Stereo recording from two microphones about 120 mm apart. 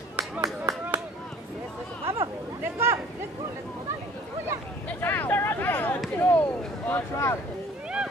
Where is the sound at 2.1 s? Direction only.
20° right (ahead or behind).